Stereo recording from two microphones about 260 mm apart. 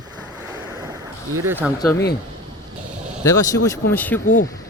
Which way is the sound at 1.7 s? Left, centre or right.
Centre.